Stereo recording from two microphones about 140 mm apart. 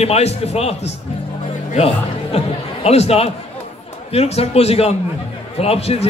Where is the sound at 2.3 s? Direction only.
45° left (ahead or behind).